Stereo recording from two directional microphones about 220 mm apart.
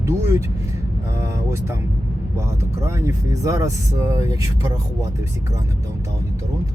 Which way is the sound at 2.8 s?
15° right (ahead or behind).